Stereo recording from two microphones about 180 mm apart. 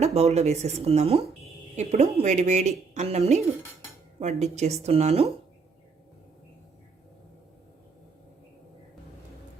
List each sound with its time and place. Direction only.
0.0 s a woman's voice: 35° right (ahead or behind)